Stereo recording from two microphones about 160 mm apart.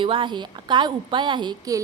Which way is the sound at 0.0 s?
30° right (ahead or behind).